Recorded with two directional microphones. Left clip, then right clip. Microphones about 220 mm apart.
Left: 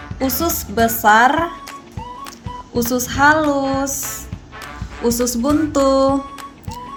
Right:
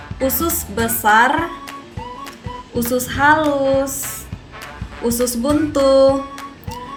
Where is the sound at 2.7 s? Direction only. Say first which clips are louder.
Left 1 dB; 45° left (ahead or behind).